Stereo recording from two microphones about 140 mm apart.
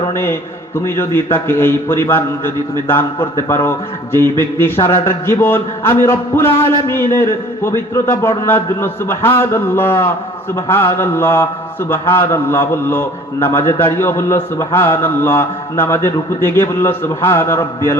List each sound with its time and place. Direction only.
0.1 s a man's voice: 15° left (ahead or behind)